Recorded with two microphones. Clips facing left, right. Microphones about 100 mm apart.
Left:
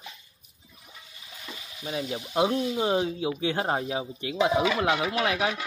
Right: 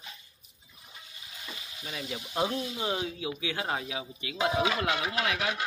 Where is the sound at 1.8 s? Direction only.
35° left (ahead or behind).